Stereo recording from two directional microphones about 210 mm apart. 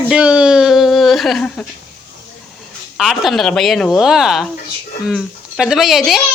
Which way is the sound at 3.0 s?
Centre (ahead or behind).